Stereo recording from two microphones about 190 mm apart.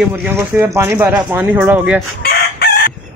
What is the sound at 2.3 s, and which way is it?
Chicken, 55° left (ahead or behind).